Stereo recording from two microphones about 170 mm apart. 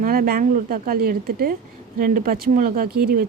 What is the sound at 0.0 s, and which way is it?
Speech, 60° right (ahead or behind).